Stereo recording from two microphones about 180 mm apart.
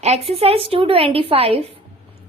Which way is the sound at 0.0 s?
35° right (ahead or behind).